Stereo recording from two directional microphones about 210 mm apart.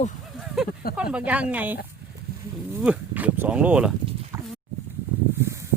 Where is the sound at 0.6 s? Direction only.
Centre (ahead or behind).